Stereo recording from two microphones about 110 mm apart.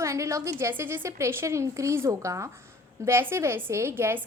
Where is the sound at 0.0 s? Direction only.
25° right (ahead or behind).